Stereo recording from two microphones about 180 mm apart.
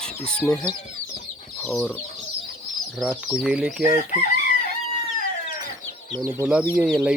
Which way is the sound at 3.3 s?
5° right (ahead or behind).